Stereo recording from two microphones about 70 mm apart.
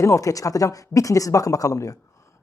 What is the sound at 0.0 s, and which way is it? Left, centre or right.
Speech, left.